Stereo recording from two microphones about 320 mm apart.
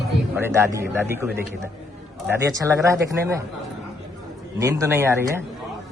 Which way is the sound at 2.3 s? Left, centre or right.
Centre.